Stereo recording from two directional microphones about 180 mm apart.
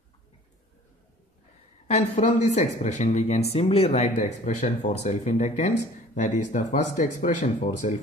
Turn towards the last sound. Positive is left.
turn(degrees=45)  # may be behind; listen again after turning